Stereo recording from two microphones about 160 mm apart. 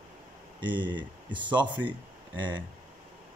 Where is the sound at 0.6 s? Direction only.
30° right (ahead or behind).